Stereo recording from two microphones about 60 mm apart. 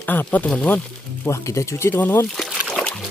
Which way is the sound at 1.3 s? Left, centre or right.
Left.